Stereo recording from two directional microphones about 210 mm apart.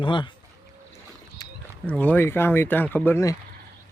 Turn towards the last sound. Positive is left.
turn(degrees=10)  # may be behind; listen again after turning